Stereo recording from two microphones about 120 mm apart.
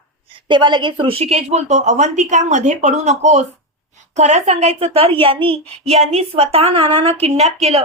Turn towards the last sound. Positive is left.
turn(degrees=-60)  # may be behind; listen again after turning